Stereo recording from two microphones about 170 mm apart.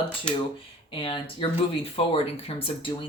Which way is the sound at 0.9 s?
30° left (ahead or behind).